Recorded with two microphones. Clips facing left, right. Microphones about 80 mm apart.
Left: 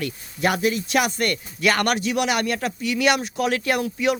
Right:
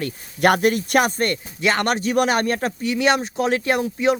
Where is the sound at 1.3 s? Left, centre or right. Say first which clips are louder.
Even; right.